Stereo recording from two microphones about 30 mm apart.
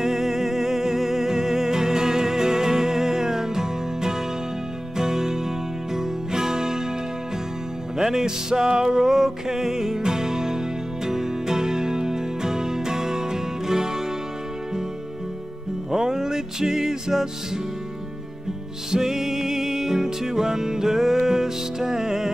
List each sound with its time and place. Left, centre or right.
0.0 s music: centre
8.0 s music: centre
8.9 s music: centre
15.9 s music: centre
18.9 s music: centre